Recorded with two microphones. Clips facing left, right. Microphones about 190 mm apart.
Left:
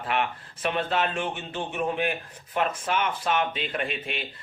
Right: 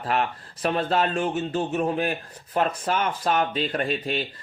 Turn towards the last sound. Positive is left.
turn(degrees=-35)  # may be behind; listen again after turning